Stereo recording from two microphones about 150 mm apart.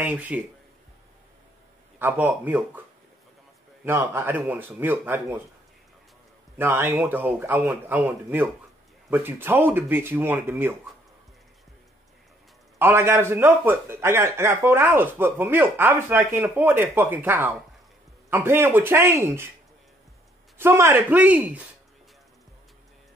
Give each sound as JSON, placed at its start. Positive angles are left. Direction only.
{"t": 0.0, "sound": "a man's voice", "side_deg": -10}
{"t": 2.0, "sound": "a man's voice", "side_deg": -10}
{"t": 3.8, "sound": "a man's voice", "side_deg": -15}
{"t": 6.6, "sound": "a man's voice", "side_deg": -15}
{"t": 12.7, "sound": "a man's voice", "side_deg": -15}
{"t": 20.5, "sound": "a man's voice", "side_deg": -15}